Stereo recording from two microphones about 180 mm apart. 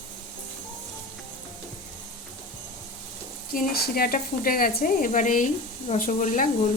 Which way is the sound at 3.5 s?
55° left (ahead or behind).